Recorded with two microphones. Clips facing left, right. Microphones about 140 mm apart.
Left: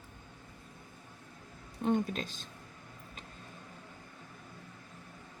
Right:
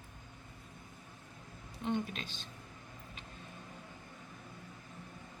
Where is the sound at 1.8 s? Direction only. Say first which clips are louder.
Left 5 dB; 45° left (ahead or behind).